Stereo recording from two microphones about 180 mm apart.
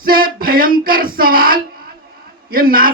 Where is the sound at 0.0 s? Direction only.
55° right (ahead or behind).